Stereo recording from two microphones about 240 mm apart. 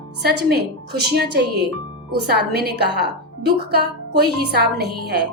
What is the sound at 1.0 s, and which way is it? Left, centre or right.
Speech, right.